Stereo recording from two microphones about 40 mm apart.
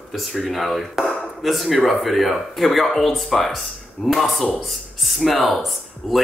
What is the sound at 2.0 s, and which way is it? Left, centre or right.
Speech, centre.